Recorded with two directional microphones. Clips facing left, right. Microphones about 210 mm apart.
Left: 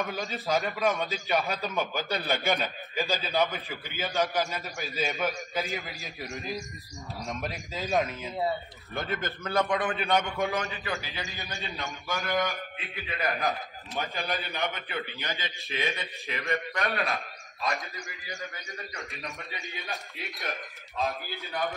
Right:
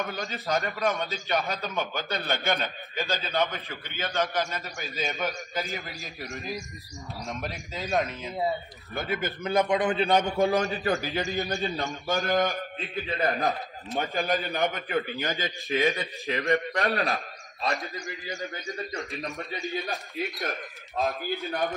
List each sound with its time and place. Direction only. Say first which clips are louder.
0.0 s a man's voice: even; centre (ahead or behind); by 16.1 s 45° right (ahead or behind)
16.3 s a man's voice: right 6 dB; 35° right (ahead or behind)
20.4 s a man's voice: right 3 dB; 45° right (ahead or behind)